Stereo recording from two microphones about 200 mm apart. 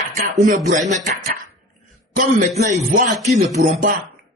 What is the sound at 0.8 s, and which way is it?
A man's voice, 35° right (ahead or behind).